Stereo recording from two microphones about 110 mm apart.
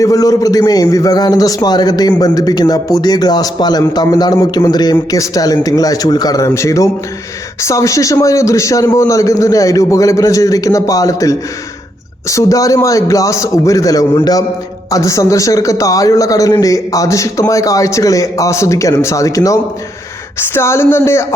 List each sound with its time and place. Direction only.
0.0 s a man's voice: 35° left (ahead or behind)